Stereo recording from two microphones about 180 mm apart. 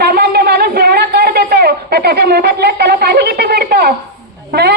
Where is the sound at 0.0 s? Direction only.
60° right (ahead or behind).